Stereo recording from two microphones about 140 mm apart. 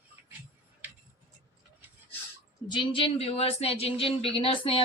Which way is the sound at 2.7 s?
40° left (ahead or behind).